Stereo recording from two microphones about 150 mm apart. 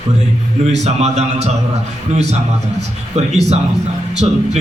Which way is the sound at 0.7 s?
45° right (ahead or behind).